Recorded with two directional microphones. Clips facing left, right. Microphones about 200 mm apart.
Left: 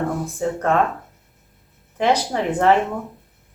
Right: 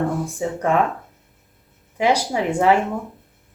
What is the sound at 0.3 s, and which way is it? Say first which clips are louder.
Speech: left 2 dB; 15° right (ahead or behind).